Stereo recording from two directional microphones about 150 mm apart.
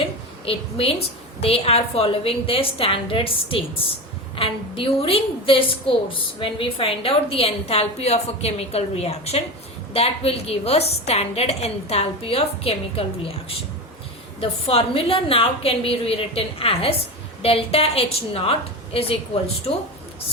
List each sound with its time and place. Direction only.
0.4 s a woman's voice: 40° left (ahead or behind)